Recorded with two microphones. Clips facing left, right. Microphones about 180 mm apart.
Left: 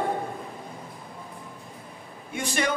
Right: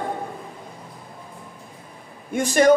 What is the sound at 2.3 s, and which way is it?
Speech, 45° right (ahead or behind).